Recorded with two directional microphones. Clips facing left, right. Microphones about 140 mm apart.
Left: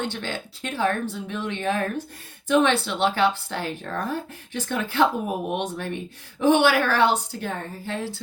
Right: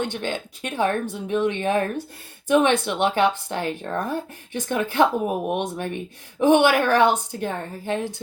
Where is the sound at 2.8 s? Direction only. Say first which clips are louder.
Right 2 dB; 15° right (ahead or behind).